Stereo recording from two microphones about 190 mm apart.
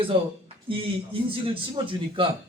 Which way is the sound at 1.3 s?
25° right (ahead or behind).